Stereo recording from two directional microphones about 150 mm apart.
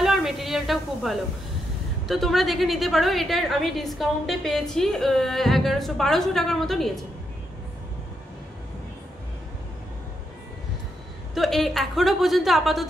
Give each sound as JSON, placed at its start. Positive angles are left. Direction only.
{"t": 0.0, "sound": "a sound", "side_deg": 0}
{"t": 2.0, "sound": "a woman's voice", "side_deg": 0}
{"t": 11.3, "sound": "a woman's voice", "side_deg": 0}